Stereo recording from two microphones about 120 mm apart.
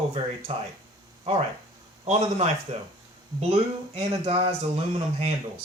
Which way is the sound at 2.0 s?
60° right (ahead or behind).